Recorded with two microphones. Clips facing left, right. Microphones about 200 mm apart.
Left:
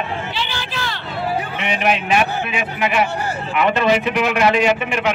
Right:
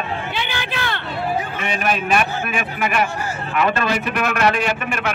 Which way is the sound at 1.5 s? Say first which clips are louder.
Left 2 dB; 15° left (ahead or behind).